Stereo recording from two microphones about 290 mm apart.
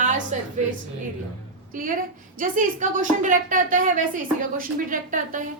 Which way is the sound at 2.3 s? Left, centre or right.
Right.